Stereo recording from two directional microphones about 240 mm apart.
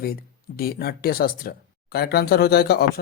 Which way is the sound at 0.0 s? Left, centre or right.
Left.